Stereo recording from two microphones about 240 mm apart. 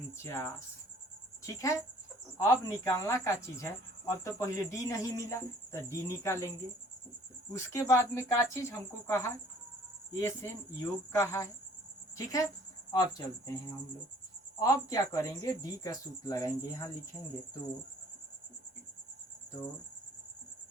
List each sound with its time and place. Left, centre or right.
0.2 s speech: centre
7.5 s speech: centre
14.6 s speech: centre